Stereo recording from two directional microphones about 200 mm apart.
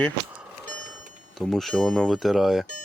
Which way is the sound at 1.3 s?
Centre (ahead or behind).